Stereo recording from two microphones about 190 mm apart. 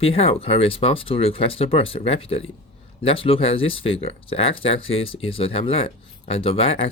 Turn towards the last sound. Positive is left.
turn(degrees=30)  # may be behind; listen again after turning